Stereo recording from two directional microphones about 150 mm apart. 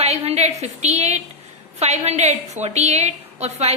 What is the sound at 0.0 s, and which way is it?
A woman's voice, 45° right (ahead or behind).